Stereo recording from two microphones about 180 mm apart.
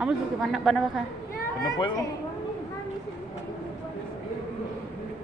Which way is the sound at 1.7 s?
25° left (ahead or behind).